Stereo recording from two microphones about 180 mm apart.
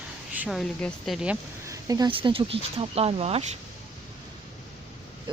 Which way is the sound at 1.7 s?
20° right (ahead or behind).